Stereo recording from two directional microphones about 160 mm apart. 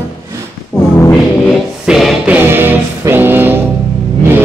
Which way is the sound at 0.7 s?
5° right (ahead or behind).